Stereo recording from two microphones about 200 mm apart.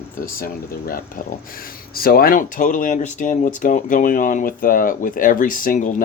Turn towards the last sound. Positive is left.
turn(degrees=40)  # may be behind; listen again after turning